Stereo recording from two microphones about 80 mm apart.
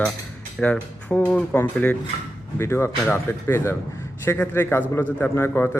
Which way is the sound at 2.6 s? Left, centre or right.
Left.